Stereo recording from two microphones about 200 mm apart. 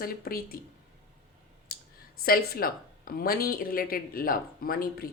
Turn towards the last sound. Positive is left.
turn(degrees=45)  # may be behind; listen again after turning